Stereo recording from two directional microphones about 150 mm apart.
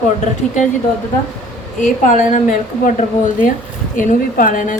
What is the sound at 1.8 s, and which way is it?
Speech, 55° left (ahead or behind).